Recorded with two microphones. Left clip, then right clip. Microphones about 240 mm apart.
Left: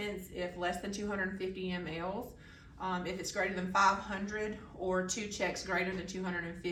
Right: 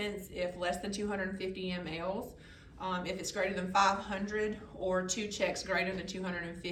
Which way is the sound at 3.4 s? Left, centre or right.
Centre.